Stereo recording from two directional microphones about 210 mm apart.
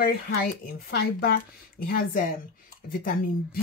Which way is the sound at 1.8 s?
40° left (ahead or behind).